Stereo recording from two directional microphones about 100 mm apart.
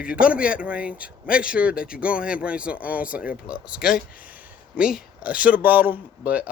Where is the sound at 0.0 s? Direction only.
10° right (ahead or behind).